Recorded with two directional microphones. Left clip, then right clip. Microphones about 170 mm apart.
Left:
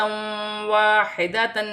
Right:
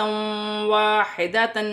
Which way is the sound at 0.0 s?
10° right (ahead or behind).